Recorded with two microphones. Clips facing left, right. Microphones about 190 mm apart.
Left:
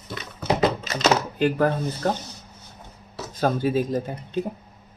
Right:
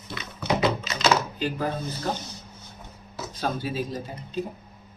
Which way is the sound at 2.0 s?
50° left (ahead or behind).